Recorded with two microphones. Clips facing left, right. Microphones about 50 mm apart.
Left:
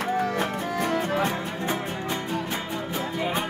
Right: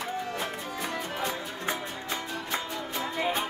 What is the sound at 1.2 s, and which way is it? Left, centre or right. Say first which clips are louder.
Music: left 5 dB; left.